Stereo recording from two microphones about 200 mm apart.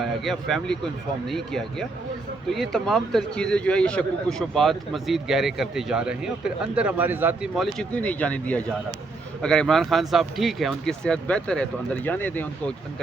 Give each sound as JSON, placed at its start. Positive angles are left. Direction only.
{"t": 0.0, "sound": "a man's voice", "side_deg": 0}